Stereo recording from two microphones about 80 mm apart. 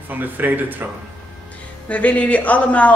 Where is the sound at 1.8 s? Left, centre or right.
Centre.